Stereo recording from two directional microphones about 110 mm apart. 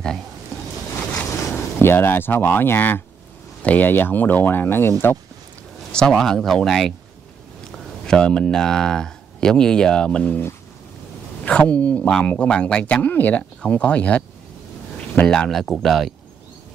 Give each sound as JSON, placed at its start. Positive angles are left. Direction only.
{"t": 1.2, "sound": "speech", "side_deg": 20}
{"t": 5.9, "sound": "speech", "side_deg": 5}
{"t": 11.4, "sound": "speech", "side_deg": 10}